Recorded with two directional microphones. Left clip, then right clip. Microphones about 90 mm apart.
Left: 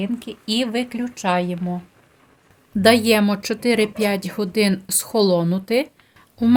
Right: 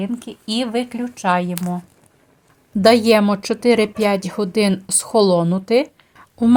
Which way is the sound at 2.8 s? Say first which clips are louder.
Right 3 dB; 35° right (ahead or behind).